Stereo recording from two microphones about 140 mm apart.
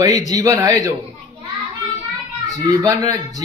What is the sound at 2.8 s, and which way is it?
Speech, 25° right (ahead or behind).